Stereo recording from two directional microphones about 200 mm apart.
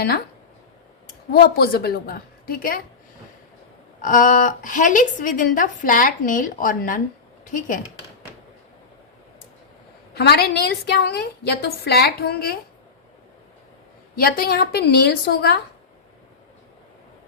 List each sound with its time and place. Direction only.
1.3 s a woman's voice: 50° left (ahead or behind)
4.0 s speech: 40° left (ahead or behind)
10.2 s a woman's voice: 55° left (ahead or behind)
14.2 s a woman's voice: 50° left (ahead or behind)